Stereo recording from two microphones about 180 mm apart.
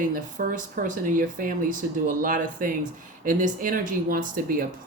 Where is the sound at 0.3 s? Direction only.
50° right (ahead or behind).